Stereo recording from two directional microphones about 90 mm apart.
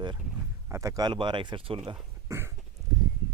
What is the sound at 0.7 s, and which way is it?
Speech, 35° right (ahead or behind).